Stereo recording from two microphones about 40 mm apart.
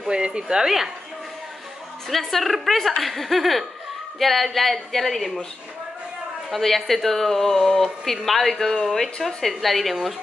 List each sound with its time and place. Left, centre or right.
0.0 s speech: right
0.7 s speech: centre
2.0 s a woman's voice: centre
6.5 s a woman's voice: centre